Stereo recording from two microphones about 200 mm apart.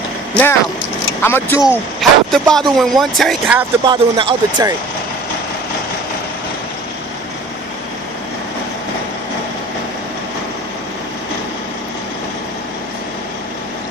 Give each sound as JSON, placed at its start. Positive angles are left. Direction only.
{"t": 0.3, "sound": "speech", "side_deg": 10}
{"t": 1.6, "sound": "speech", "side_deg": 0}
{"t": 3.8, "sound": "speech", "side_deg": -25}